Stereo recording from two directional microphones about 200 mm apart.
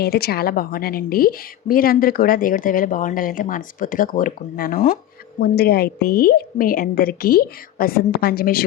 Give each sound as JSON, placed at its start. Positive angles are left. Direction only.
{"t": 0.0, "sound": "a woman's voice", "side_deg": 50}